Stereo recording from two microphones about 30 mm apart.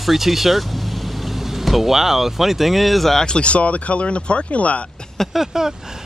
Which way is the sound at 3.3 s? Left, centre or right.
Left.